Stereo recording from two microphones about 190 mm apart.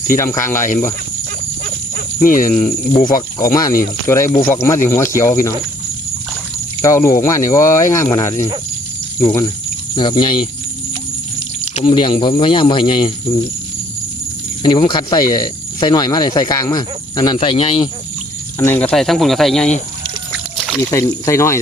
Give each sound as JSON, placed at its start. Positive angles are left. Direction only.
{"t": 0.2, "sound": "speech", "side_deg": 15}
{"t": 2.2, "sound": "speech", "side_deg": 45}
{"t": 3.3, "sound": "speech", "side_deg": 20}
{"t": 6.8, "sound": "speech", "side_deg": 15}
{"t": 9.9, "sound": "speech", "side_deg": 25}
{"t": 11.6, "sound": "speech", "side_deg": 35}
{"t": 14.6, "sound": "speech", "side_deg": 25}
{"t": 18.6, "sound": "speech", "side_deg": 10}
{"t": 20.9, "sound": "speech", "side_deg": 15}